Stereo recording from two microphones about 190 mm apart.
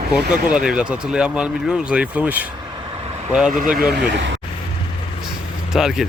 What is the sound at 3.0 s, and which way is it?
Vehicle, 35° right (ahead or behind).